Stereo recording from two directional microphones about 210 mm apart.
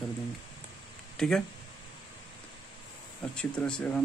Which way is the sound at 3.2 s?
5° left (ahead or behind).